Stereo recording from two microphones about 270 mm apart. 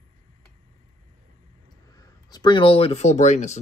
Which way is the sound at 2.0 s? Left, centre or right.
Centre.